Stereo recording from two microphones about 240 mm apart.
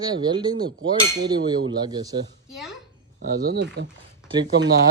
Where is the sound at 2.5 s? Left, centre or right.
Centre.